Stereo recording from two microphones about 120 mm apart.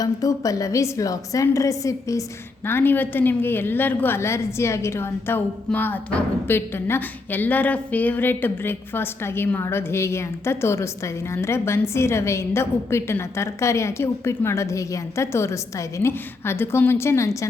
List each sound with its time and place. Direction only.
0.0 s a woman's voice: 30° left (ahead or behind)